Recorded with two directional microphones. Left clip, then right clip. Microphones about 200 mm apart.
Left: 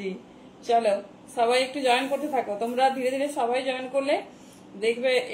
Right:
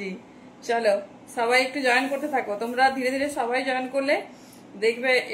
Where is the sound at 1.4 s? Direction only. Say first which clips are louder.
Right 1 dB; 10° right (ahead or behind).